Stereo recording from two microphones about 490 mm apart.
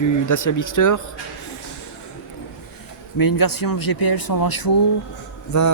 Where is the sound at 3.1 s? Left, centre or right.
Left.